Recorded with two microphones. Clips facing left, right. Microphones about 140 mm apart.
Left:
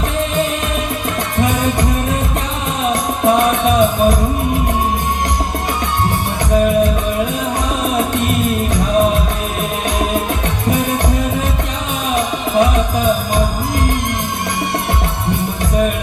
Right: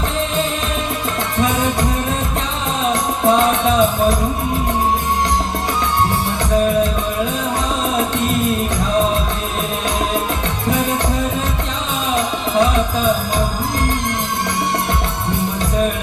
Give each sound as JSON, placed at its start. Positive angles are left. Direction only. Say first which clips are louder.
{"t": 2.9, "sound": "music", "louder": "left 1 dB", "side_deg": 20}
{"t": 12.1, "sound": "music", "louder": "left 2 dB", "side_deg": 20}